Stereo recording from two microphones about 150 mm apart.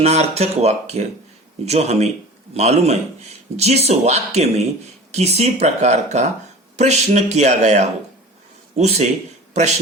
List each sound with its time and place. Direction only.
0.0 s speech: 45° right (ahead or behind)